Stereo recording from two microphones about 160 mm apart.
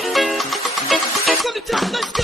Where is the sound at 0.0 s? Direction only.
Centre (ahead or behind).